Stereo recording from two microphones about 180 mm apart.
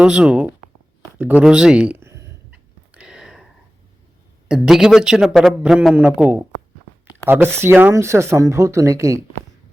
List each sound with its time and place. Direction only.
0.0 s a man's voice: 5° right (ahead or behind)
1.4 s a sound: 5° right (ahead or behind)
4.4 s a man's voice: 5° right (ahead or behind)